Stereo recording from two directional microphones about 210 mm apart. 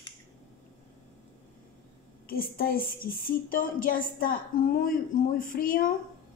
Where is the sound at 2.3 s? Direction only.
45° left (ahead or behind).